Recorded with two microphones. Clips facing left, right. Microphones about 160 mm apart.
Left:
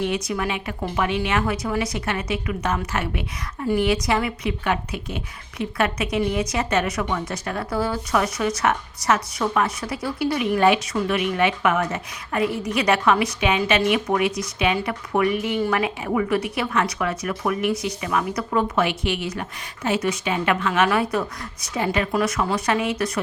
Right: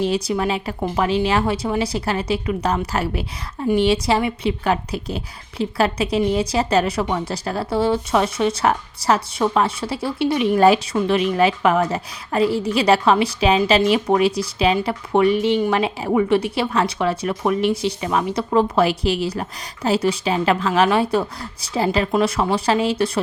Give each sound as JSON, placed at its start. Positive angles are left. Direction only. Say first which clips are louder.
{"t": 0.0, "sound": "a woman's voice", "louder": "right 4 dB", "side_deg": -30}